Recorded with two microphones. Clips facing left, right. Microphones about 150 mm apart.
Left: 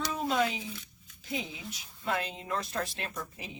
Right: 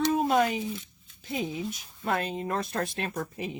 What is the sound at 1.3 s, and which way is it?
Speech, 50° right (ahead or behind).